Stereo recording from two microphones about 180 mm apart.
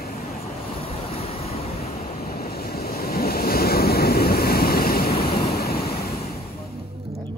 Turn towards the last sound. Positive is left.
turn(degrees=60)  # may be behind; listen again after turning